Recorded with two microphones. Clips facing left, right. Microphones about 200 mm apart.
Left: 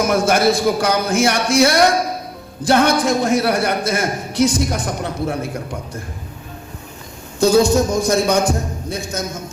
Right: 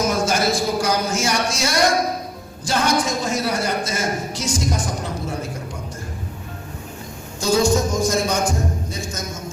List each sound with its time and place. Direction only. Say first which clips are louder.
0.0 s a man's voice: left 5 dB; 60° left (ahead or behind)
7.4 s a man's voice: left 5 dB; 60° left (ahead or behind)